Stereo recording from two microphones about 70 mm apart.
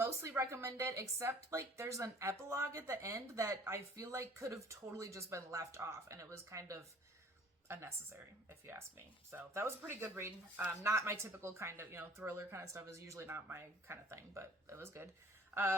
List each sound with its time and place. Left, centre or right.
0.0 s a woman's voice: right
13.2 s speech: right